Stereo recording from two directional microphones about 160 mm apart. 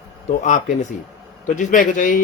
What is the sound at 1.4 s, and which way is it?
Speech, 50° left (ahead or behind).